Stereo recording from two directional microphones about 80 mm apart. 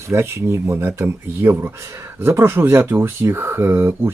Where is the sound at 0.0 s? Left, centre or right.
Right.